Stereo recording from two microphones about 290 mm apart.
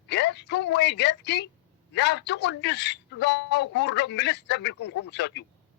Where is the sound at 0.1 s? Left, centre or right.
Left.